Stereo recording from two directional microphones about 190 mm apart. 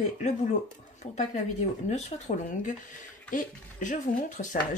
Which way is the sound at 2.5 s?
45° left (ahead or behind).